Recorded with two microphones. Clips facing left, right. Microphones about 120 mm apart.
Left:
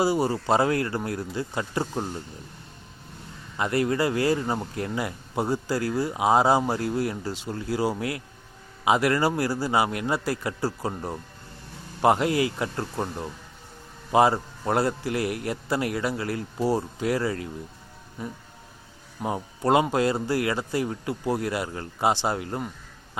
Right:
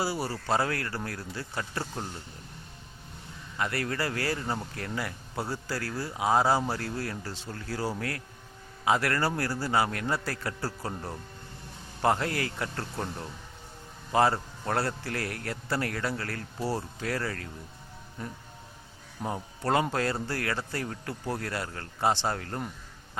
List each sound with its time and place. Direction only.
0.0 s speech: 20° left (ahead or behind)
3.6 s speech: 20° left (ahead or behind)